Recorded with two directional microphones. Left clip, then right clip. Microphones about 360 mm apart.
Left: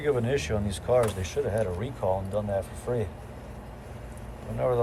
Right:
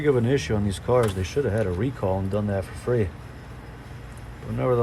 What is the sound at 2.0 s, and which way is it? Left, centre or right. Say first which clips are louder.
Speech: left 1 dB; right.